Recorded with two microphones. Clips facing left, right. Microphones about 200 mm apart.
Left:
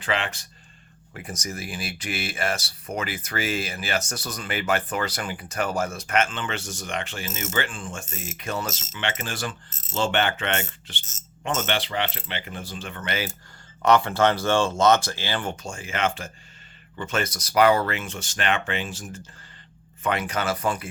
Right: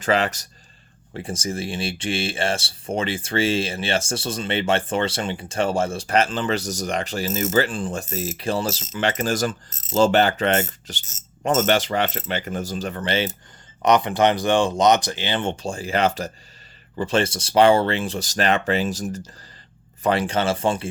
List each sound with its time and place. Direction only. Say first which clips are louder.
0.0 s speech: right 7 dB; 40° right (ahead or behind)
1.1 s speech: right 7 dB; 30° right (ahead or behind)
13.8 s speech: right 2 dB; 20° right (ahead or behind)